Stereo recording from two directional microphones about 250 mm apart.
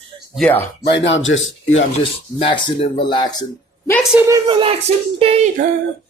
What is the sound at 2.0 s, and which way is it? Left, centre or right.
Speech, centre.